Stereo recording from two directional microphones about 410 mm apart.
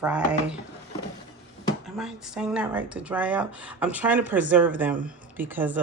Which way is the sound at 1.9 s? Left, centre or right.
Centre.